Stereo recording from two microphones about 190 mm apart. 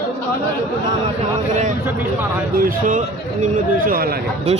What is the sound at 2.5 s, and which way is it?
Speech, 45° right (ahead or behind).